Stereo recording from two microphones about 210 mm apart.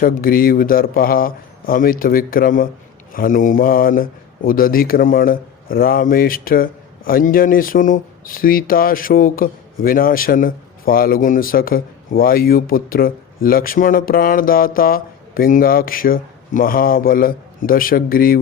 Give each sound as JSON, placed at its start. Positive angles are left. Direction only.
{"t": 0.0, "sound": "speech", "side_deg": 45}